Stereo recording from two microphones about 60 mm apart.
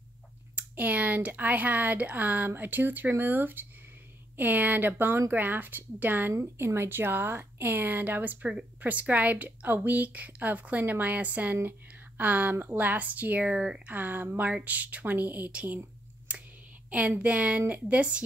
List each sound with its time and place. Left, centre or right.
0.6 s speech: right
6.6 s speech: right; by 13.8 s centre
13.8 s speech: right
16.3 s clicking: right
17.2 s speech: right